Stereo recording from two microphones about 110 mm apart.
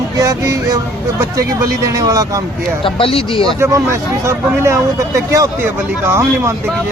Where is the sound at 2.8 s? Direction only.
55° left (ahead or behind).